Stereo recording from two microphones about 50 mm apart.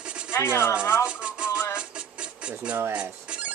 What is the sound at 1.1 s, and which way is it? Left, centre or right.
Music, centre.